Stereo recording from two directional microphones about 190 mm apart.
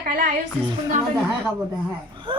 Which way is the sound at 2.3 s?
25° right (ahead or behind).